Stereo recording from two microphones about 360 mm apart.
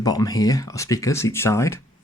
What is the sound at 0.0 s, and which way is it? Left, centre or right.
Speech, centre.